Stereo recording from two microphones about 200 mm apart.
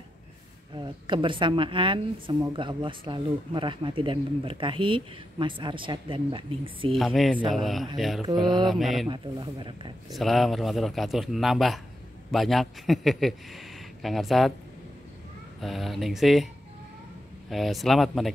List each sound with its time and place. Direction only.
0.7 s a woman's voice: 25° right (ahead or behind)
7.0 s a man's voice: centre (ahead or behind)
9.0 s a woman's voice: 25° right (ahead or behind)
10.1 s a man's voice: centre (ahead or behind)
15.6 s a man's voice: centre (ahead or behind)
17.5 s a man's voice: centre (ahead or behind)